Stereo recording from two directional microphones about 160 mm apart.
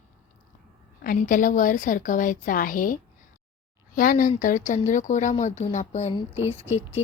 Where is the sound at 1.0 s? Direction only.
60° left (ahead or behind).